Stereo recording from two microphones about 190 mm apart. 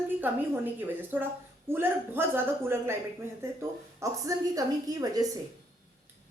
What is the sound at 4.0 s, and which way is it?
A woman's voice, 20° right (ahead or behind).